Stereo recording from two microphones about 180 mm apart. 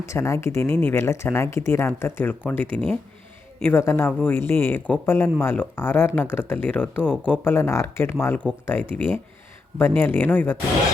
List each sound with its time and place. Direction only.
0.0 s speech: 15° left (ahead or behind)